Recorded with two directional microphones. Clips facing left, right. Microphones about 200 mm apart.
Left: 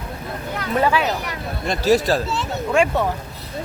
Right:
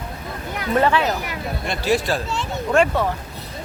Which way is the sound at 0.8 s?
10° left (ahead or behind).